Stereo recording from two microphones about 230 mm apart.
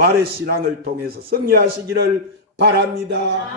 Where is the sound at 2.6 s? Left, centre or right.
Right.